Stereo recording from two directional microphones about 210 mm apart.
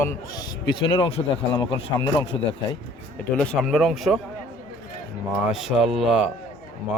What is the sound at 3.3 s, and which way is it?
Speech, 5° left (ahead or behind).